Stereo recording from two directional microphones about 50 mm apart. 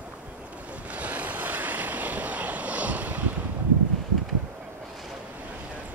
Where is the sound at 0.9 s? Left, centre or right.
Right.